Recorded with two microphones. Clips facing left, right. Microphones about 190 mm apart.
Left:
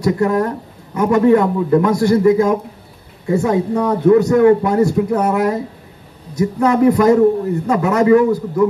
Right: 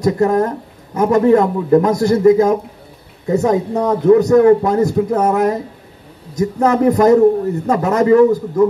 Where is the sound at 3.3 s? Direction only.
40° right (ahead or behind).